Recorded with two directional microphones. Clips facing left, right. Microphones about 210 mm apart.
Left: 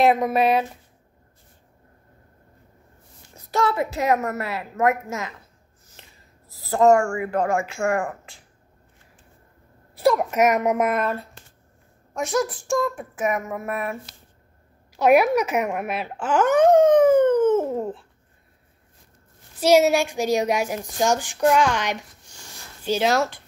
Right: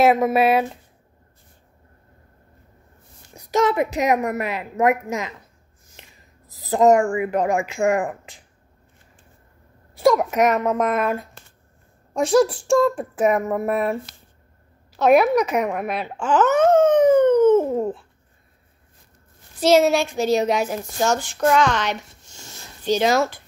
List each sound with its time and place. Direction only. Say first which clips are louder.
0.0 s a woman's voice: right 2 dB; 5° right (ahead or behind)
3.3 s a woman's voice: right 4 dB; 15° right (ahead or behind)
6.5 s a woman's voice: right 1 dB; 20° right (ahead or behind)
9.9 s a woman's voice: right 2 dB; 5° left (ahead or behind)
10.9 s a woman's voice: right 2 dB; 10° right (ahead or behind)
12.1 s speech: right 7 dB; 30° right (ahead or behind)
15.0 s speech: right 1 dB; 10° left (ahead or behind)
19.6 s a woman's voice: right 1 dB; 10° left (ahead or behind)